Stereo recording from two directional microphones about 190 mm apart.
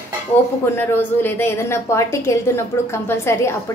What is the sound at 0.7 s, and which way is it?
A woman's voice, 10° left (ahead or behind).